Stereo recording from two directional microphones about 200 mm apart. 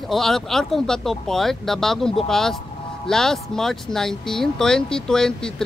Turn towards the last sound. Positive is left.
turn(degrees=5)  # may be behind; listen again after turning